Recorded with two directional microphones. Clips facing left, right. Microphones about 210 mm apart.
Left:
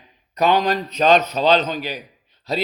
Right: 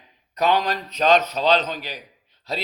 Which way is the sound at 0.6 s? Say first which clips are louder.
Left 4 dB; 5° left (ahead or behind).